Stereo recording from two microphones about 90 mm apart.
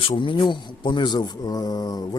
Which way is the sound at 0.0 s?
70° left (ahead or behind).